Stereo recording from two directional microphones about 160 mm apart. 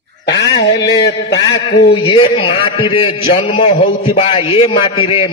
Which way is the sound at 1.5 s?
90° left.